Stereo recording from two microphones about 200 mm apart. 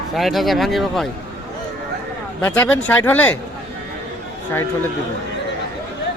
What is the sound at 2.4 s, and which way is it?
Speech, 10° left (ahead or behind).